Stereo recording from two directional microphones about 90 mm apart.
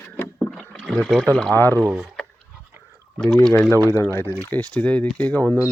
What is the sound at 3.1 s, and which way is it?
Speech, 5° left (ahead or behind).